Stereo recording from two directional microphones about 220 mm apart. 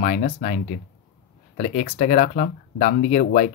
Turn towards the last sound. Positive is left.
turn(degrees=35)  # may be behind; listen again after turning